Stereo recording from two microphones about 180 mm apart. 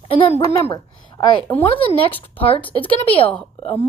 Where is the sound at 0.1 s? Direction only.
30° left (ahead or behind).